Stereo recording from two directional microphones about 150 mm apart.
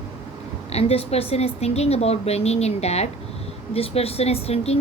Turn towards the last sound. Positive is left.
turn(degrees=45)  # may be behind; listen again after turning